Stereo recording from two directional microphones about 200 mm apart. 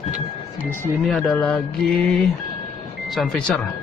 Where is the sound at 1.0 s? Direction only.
Centre (ahead or behind).